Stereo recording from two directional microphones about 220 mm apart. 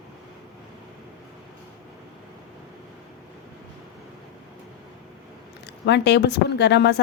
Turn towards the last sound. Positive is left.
turn(degrees=50)  # may be behind; listen again after turning